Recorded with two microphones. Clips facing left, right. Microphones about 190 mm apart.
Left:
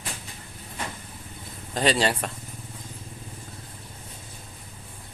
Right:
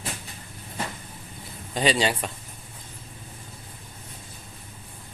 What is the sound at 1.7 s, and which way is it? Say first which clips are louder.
Speech: even; centre (ahead or behind).